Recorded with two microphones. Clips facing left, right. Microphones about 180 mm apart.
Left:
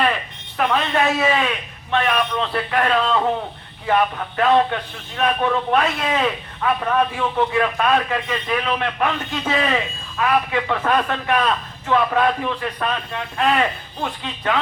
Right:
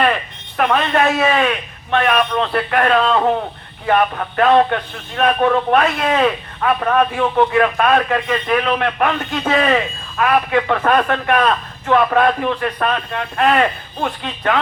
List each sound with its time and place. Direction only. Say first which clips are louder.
0.0 s a man's voice: right 4 dB; 60° right (ahead or behind)